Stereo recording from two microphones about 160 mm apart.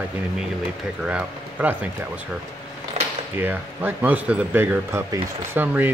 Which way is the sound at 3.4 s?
10° right (ahead or behind).